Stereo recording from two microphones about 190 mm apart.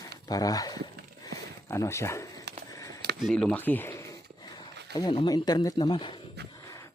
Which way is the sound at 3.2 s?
5° left (ahead or behind).